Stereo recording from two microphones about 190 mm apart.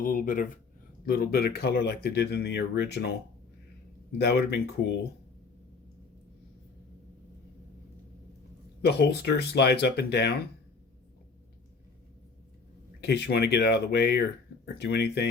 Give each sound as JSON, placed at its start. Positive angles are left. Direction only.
{"t": 0.0, "sound": "speech", "side_deg": 45}
{"t": 4.2, "sound": "speech", "side_deg": 60}
{"t": 8.8, "sound": "speech", "side_deg": 60}
{"t": 13.0, "sound": "speech", "side_deg": 60}